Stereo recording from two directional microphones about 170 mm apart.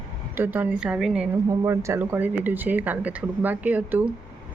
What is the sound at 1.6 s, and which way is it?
Speech, 15° right (ahead or behind).